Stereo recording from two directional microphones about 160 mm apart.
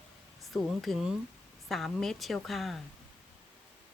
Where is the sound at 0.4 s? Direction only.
Centre (ahead or behind).